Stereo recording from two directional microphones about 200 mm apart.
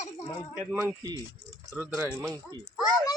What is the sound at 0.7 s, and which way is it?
Speech, 15° right (ahead or behind).